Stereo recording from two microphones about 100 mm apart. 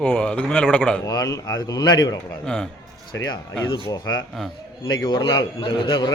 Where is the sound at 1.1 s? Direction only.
40° left (ahead or behind).